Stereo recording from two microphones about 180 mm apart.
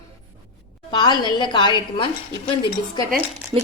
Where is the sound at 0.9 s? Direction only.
25° left (ahead or behind).